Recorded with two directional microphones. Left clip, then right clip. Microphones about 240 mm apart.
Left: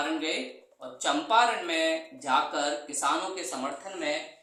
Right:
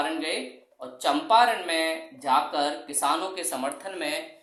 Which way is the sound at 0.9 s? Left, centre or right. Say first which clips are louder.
Right 4 dB; right.